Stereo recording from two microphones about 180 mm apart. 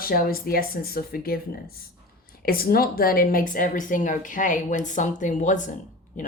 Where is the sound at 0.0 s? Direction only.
55° left (ahead or behind).